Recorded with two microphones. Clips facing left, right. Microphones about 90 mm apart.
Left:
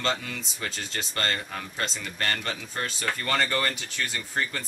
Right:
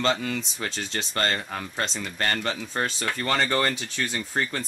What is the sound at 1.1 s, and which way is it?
Speech, 40° right (ahead or behind).